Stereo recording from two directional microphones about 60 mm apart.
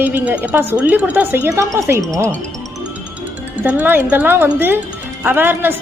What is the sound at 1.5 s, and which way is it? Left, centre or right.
Speech, right.